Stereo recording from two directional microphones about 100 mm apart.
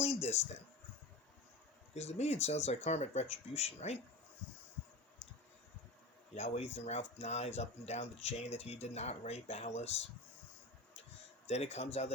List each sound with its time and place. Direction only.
0.0 s a sound: 90° left
2.0 s speech: 90° left
6.3 s speech: 90° left
11.4 s speech: 90° left